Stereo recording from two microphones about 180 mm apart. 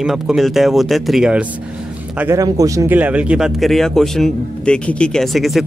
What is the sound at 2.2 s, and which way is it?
A man's voice, 15° right (ahead or behind).